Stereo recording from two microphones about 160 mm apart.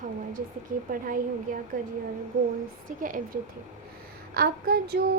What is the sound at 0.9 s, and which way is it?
Speech, 60° right (ahead or behind).